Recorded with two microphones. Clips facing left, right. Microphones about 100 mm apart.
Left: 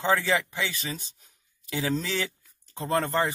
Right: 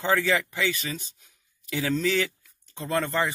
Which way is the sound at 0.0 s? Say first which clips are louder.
Right 1 dB; 30° left (ahead or behind).